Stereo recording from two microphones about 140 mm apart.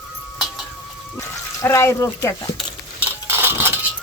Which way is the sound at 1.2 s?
20° left (ahead or behind).